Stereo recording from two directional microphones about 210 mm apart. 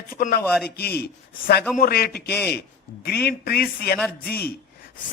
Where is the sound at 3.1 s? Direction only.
50° left (ahead or behind).